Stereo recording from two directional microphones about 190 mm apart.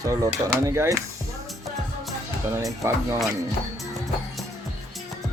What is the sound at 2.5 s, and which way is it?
Speech, 15° right (ahead or behind).